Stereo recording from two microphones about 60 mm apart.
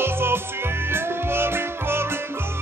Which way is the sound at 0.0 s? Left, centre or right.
Right.